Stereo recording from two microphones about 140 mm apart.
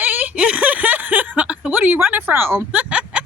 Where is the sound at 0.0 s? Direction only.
15° right (ahead or behind).